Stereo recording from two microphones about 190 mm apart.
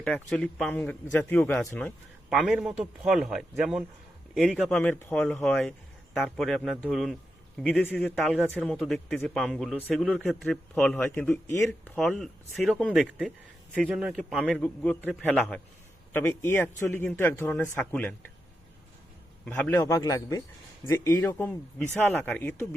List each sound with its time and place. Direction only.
0.0 s speech: 5° left (ahead or behind)
2.3 s speech: centre (ahead or behind)
19.5 s speech: 10° left (ahead or behind)